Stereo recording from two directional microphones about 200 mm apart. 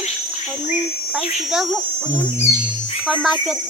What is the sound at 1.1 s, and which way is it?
Speech, centre (ahead or behind).